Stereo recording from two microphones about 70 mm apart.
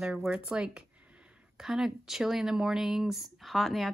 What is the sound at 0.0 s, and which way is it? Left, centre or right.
Speech, centre.